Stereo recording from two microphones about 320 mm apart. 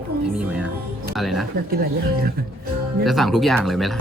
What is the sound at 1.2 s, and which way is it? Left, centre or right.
Speech, centre.